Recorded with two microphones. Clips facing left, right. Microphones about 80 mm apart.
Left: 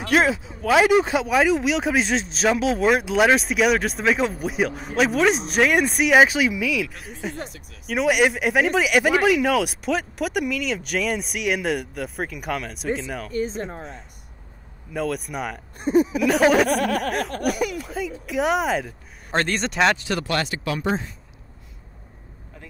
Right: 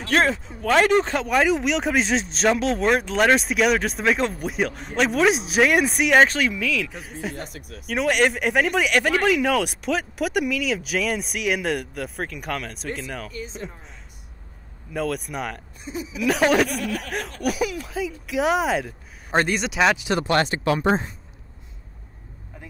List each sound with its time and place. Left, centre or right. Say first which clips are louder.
0.0 s speech: left 1 dB; centre
6.9 s speech: right 1 dB; centre
7.4 s speech: right 3 dB; right
7.8 s speech: left 1 dB; centre
13.6 s a sound: left 6 dB; left
14.9 s speech: even; centre
15.8 s a sound: left 12 dB; left
16.3 s speech: right 2 dB; centre
16.6 s a sound: left 6 dB; left
17.5 s speech: right 3 dB; centre
20.1 s speech: right 4 dB; right